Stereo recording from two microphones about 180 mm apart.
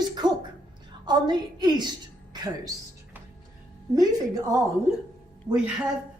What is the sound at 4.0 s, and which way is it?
Speech, 20° right (ahead or behind).